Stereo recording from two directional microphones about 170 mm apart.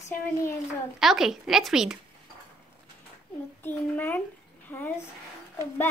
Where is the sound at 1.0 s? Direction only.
Centre (ahead or behind).